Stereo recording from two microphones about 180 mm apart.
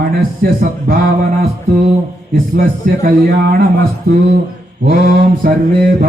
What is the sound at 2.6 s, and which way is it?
Speech, 50° right (ahead or behind).